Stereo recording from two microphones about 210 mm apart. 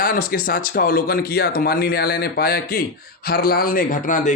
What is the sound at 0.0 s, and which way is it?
Speech, 45° left (ahead or behind).